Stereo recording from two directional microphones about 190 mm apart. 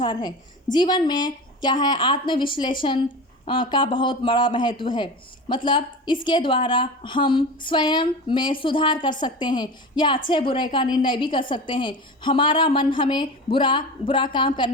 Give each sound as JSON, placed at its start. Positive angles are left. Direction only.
{"t": 0.0, "sound": "a woman's voice", "side_deg": 25}